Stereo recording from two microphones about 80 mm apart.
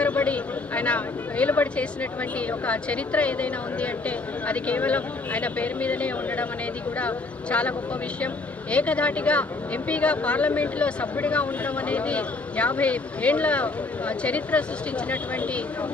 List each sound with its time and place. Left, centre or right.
0.0 s a sound: centre
2.5 s speech: centre
8.7 s speech: centre